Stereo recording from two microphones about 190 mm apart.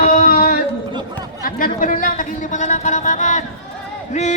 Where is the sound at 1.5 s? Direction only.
45° left (ahead or behind).